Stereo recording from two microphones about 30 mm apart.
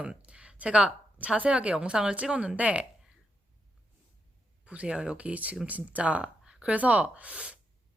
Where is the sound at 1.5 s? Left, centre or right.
Right.